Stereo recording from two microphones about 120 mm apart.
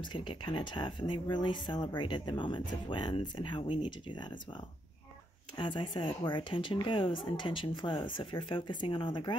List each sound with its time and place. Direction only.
0.0 s speech: 40° left (ahead or behind)
5.6 s speech: 45° left (ahead or behind)